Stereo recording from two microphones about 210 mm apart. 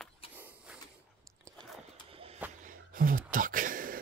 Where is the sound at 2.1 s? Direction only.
25° right (ahead or behind).